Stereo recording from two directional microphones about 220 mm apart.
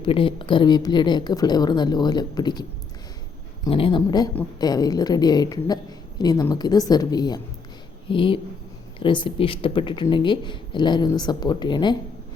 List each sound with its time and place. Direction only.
0.0 s a woman's voice: 25° left (ahead or behind)